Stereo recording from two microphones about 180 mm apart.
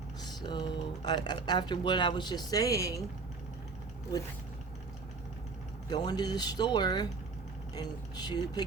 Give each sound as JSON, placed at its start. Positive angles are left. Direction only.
{"t": 0.2, "sound": "speech", "side_deg": 25}
{"t": 5.9, "sound": "speech", "side_deg": 20}